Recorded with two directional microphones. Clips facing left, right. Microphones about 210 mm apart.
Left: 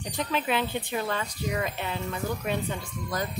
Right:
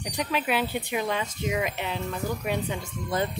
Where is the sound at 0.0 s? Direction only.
10° right (ahead or behind).